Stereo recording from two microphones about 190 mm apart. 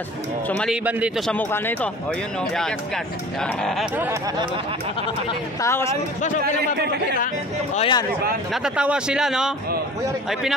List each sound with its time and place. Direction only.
0.5 s speech: 5° left (ahead or behind)
0.8 s speech: 5° right (ahead or behind); by 1.9 s 10° left (ahead or behind)
3.9 s speech: 10° right (ahead or behind)
5.6 s speech: 15° left (ahead or behind)
6.8 s speech: 60° right (ahead or behind)
7.7 s speech: 30° left (ahead or behind)
8.6 s speech: 5° right (ahead or behind)